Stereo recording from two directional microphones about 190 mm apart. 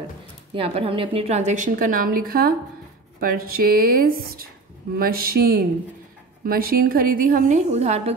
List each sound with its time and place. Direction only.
0.6 s a woman's voice: 30° right (ahead or behind)